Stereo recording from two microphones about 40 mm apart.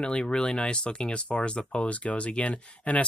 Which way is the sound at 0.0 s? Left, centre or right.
Left.